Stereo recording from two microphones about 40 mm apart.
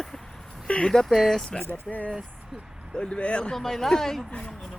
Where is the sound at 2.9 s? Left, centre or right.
Left.